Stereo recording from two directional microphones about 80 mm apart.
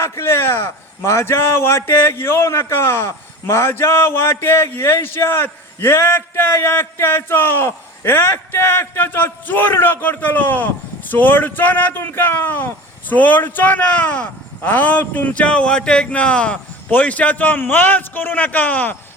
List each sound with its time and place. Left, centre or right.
0.0 s a man's voice: left